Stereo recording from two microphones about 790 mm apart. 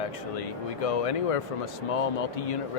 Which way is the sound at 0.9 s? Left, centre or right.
Left.